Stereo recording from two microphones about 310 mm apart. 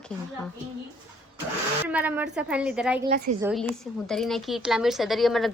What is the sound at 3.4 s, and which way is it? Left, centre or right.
A woman's voice, centre.